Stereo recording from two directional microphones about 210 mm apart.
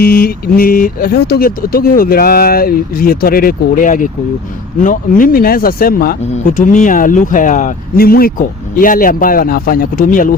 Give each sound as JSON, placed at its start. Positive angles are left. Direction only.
{"t": 0.0, "sound": "speech", "side_deg": 45}